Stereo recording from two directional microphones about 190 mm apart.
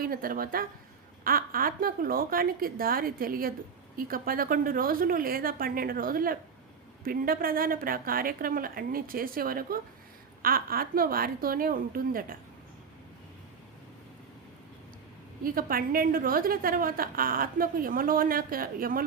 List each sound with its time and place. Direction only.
0.0 s a woman's voice: 50° right (ahead or behind)
15.4 s a woman's voice: 50° right (ahead or behind)